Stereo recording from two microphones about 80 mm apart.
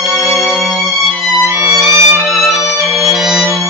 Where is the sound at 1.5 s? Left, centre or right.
Right.